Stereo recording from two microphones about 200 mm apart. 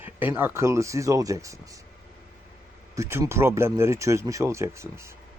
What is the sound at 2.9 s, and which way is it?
Speech, 15° right (ahead or behind).